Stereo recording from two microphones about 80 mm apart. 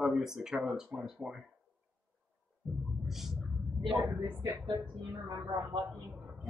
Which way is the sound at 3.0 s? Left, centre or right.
Centre.